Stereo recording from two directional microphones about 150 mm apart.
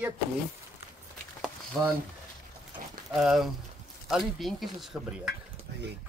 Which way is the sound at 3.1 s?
Centre (ahead or behind).